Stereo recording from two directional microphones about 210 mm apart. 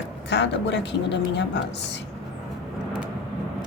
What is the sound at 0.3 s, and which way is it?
Speech, 55° left (ahead or behind).